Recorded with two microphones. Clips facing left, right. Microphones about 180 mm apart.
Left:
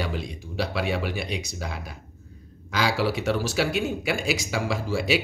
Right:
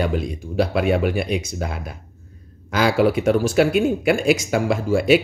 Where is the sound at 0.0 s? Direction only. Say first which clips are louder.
Right 8 dB; 50° right (ahead or behind).